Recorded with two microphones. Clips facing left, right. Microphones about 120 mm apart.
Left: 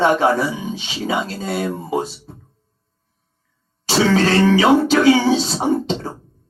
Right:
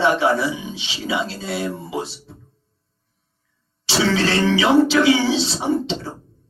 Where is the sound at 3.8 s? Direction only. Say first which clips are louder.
Left 4 dB; 45° left (ahead or behind).